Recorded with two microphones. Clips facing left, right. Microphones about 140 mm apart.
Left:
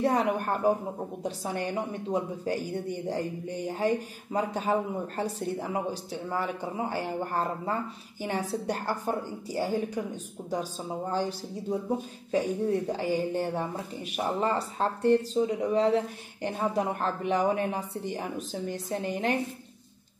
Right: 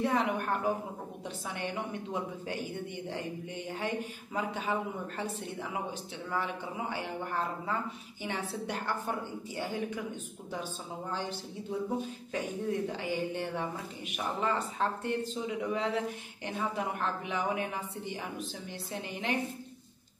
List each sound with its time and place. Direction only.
0.0 s a woman's voice: 40° left (ahead or behind)